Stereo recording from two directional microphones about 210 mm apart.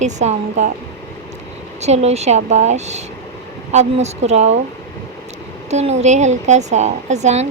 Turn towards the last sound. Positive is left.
turn(degrees=-35)  # may be behind; listen again after turning